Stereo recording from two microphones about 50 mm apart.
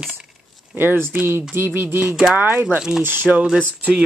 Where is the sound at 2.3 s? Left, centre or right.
Right.